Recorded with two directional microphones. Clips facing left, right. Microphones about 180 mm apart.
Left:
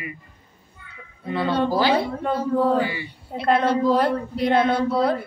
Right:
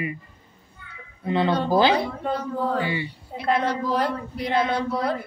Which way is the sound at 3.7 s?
25° left (ahead or behind).